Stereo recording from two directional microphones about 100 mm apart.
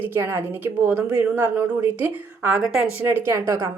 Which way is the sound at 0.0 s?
20° right (ahead or behind).